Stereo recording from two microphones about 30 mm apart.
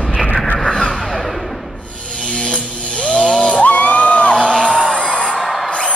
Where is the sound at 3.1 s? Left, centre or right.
Left.